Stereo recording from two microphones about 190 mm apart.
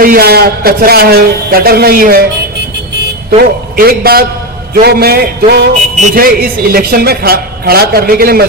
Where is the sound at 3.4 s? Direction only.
55° right (ahead or behind).